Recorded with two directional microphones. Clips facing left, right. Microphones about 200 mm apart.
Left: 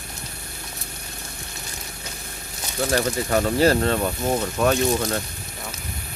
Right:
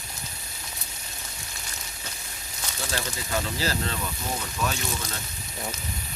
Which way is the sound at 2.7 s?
55° left (ahead or behind).